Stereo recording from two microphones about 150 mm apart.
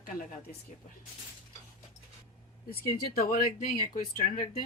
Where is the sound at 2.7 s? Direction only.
80° left.